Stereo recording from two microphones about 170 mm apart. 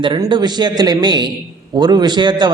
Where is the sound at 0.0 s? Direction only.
30° right (ahead or behind).